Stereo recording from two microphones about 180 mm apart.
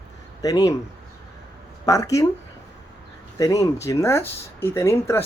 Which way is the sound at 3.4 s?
20° left (ahead or behind).